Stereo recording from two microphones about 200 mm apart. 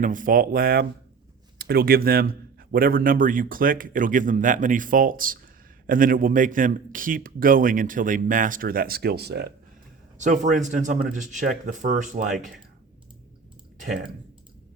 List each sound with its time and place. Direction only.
0.0 s speech: 40° right (ahead or behind)
10.2 s speech: 35° right (ahead or behind)
13.7 s speech: 40° right (ahead or behind)